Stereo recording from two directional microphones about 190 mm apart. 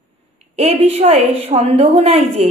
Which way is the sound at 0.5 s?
35° right (ahead or behind).